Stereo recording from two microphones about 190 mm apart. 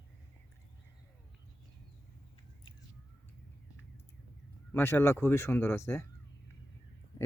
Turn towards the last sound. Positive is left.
turn(degrees=15)  # may be behind; listen again after turning